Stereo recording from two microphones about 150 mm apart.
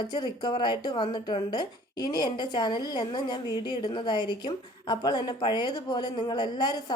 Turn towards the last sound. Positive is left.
turn(degrees=30)  # may be behind; listen again after turning